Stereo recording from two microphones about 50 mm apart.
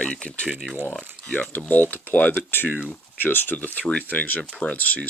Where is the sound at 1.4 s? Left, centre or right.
Left.